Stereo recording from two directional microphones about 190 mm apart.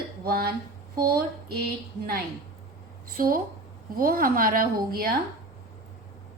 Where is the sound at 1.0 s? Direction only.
55° right (ahead or behind).